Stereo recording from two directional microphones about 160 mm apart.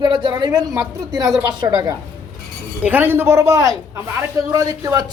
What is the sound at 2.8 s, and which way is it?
A woman's voice, 10° right (ahead or behind).